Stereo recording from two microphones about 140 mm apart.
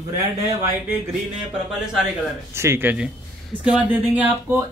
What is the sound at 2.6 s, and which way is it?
Speech, 15° right (ahead or behind).